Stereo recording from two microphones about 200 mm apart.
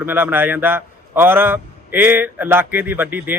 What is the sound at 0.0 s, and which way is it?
Speech, 10° right (ahead or behind).